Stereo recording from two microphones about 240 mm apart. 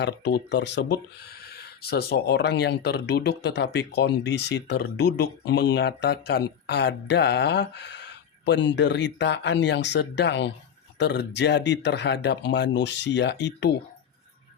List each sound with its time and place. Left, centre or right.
0.0 s speech: left